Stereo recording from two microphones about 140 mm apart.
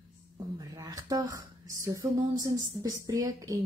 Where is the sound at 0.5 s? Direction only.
25° right (ahead or behind).